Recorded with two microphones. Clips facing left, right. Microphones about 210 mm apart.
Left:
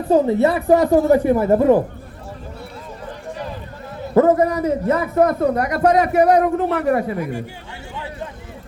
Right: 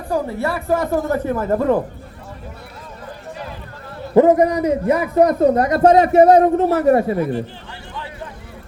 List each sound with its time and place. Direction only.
0.1 s speech: 20° left (ahead or behind)
4.1 s a man's voice: 15° right (ahead or behind)
7.2 s speech: 10° left (ahead or behind)